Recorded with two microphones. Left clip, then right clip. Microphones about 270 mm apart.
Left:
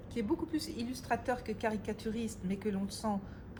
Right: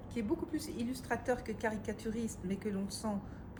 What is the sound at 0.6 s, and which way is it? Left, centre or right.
A woman's voice, left.